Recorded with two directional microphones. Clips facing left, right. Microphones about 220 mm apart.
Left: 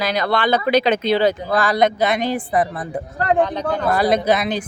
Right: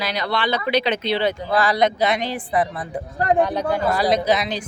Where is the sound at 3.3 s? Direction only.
10° right (ahead or behind).